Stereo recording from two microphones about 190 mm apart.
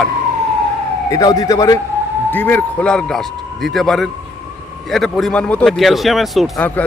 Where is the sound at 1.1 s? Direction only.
20° left (ahead or behind).